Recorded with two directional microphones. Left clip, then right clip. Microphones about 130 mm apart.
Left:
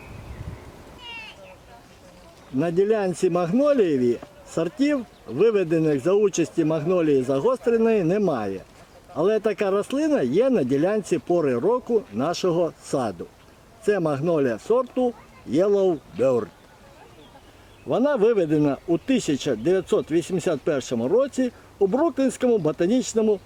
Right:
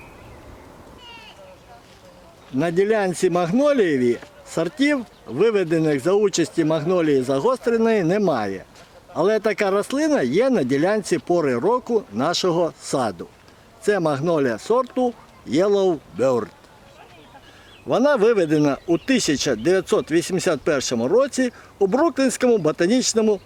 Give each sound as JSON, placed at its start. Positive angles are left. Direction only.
{"t": 1.0, "sound": "a sound", "side_deg": 10}
{"t": 2.6, "sound": "speech", "side_deg": -25}
{"t": 17.8, "sound": "speech", "side_deg": -30}